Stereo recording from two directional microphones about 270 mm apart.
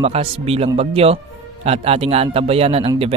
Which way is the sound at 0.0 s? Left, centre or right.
Right.